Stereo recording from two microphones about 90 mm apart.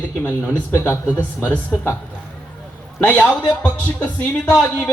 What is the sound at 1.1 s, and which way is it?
Speech, 20° left (ahead or behind).